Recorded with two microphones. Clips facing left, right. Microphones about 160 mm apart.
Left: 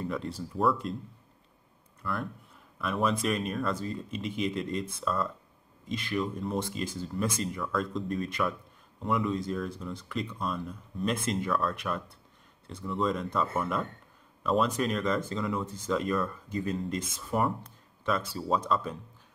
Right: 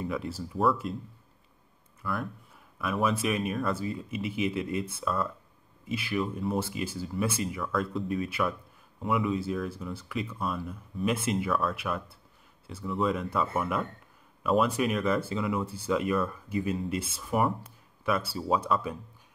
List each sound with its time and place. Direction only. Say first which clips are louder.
0.0 s speech: right 1 dB; 5° right (ahead or behind)
2.0 s speech: right 1 dB; 5° right (ahead or behind)